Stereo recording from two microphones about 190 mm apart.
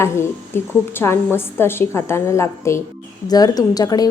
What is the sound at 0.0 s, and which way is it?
A woman's voice, 15° left (ahead or behind).